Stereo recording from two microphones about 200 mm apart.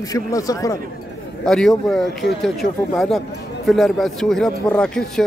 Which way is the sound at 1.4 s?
Centre (ahead or behind).